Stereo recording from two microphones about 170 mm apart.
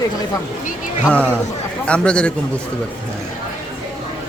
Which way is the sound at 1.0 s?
5° left (ahead or behind).